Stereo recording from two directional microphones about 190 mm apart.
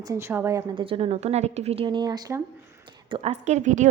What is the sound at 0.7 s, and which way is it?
Speech, 25° right (ahead or behind).